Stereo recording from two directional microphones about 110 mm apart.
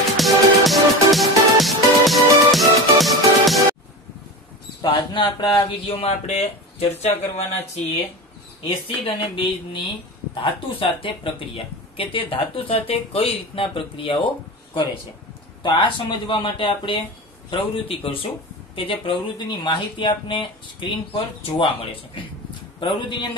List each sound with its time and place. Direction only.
0.2 s music: centre (ahead or behind)
4.8 s speech: 50° left (ahead or behind)
5.9 s speech: 60° left (ahead or behind); by 7.8 s 80° left
8.6 s speech: 50° left (ahead or behind)
15.6 s speech: 45° left (ahead or behind)